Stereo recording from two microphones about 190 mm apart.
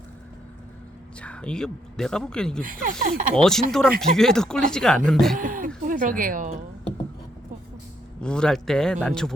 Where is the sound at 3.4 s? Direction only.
Centre (ahead or behind).